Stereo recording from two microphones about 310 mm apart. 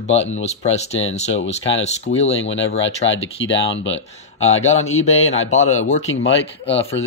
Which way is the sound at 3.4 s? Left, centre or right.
Left.